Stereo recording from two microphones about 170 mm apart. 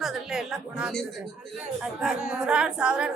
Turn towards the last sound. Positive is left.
turn(degrees=-5)  # may be behind; listen again after turning